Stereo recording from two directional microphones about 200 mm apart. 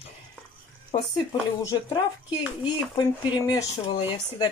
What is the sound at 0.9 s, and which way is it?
Speech, 20° left (ahead or behind).